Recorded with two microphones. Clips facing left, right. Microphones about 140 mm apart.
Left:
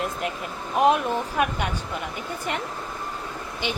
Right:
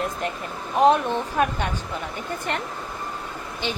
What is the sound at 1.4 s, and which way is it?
Speech, 10° left (ahead or behind).